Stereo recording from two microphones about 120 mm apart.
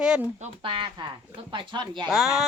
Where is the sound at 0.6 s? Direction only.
45° right (ahead or behind).